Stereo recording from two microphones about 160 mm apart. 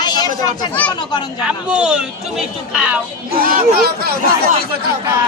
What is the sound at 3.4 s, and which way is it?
Speech, 65° right (ahead or behind).